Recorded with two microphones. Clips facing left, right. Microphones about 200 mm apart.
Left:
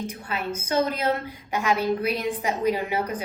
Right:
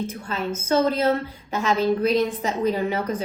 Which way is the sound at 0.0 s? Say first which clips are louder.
Right 3 dB; 15° left (ahead or behind).